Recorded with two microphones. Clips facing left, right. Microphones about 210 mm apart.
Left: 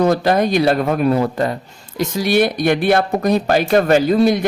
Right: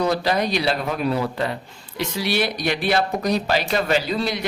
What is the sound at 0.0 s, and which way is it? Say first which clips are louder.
Speech: left 6 dB; 50° left (ahead or behind).